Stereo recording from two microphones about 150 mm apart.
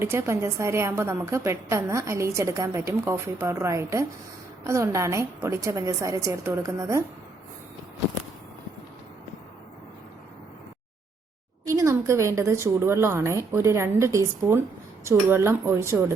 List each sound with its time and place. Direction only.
0.0 s a woman's voice: 20° right (ahead or behind)
11.7 s a woman's voice: 20° right (ahead or behind)